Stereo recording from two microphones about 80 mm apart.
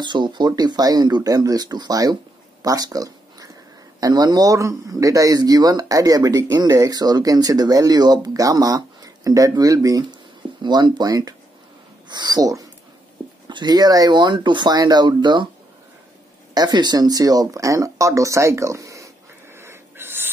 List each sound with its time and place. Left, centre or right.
0.0 s speech: right
2.6 s a sound: right
4.0 s speech: right
4.6 s speech: right
10.6 s speech: right
12.1 s speech: right
13.5 s speech: right
16.5 s speech: right
19.5 s a sound: right